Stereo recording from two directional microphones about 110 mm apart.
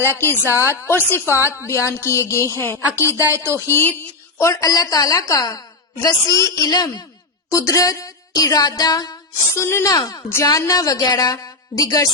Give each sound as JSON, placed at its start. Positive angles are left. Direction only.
{"t": 0.0, "sound": "a woman's voice", "side_deg": 20}
{"t": 9.6, "sound": "a woman's voice", "side_deg": 25}